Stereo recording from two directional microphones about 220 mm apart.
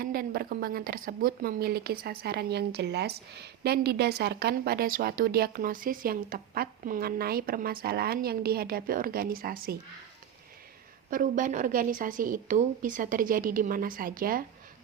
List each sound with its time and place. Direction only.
0.0 s a woman's voice: 40° right (ahead or behind)
11.1 s a woman's voice: 35° right (ahead or behind)